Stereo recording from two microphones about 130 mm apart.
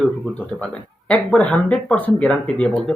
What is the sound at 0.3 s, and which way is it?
Speech, 10° left (ahead or behind).